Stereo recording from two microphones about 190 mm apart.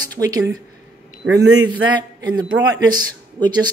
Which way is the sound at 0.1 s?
20° right (ahead or behind).